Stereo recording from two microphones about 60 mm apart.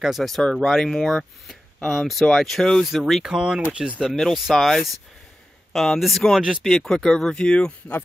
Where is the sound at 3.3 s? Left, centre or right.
Centre.